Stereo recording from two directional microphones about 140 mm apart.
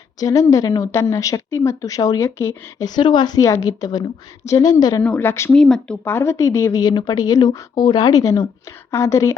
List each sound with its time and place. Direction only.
0.2 s a woman's voice: 25° left (ahead or behind)
5.0 s speech: 15° left (ahead or behind)
5.5 s speech: 5° left (ahead or behind)
6.1 s a woman's voice: 20° left (ahead or behind)